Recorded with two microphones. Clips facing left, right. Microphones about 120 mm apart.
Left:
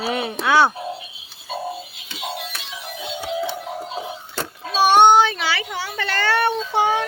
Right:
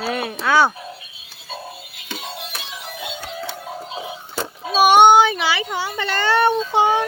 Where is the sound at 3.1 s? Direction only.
20° left (ahead or behind).